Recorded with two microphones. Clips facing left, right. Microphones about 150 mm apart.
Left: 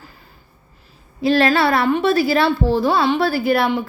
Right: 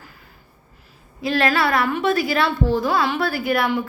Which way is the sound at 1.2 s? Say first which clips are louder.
Left 4 dB; 30° left (ahead or behind).